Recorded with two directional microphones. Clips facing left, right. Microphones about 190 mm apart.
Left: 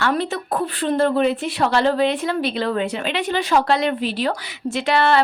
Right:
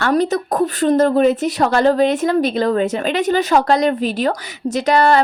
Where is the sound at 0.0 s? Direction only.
40° right (ahead or behind).